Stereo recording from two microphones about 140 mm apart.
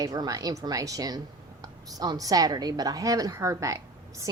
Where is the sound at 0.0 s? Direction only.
25° right (ahead or behind).